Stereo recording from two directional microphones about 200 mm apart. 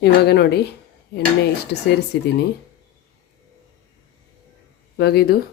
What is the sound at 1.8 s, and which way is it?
Speech, 55° left (ahead or behind).